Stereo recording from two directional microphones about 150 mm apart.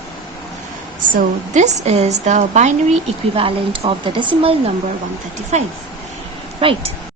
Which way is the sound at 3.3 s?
35° right (ahead or behind).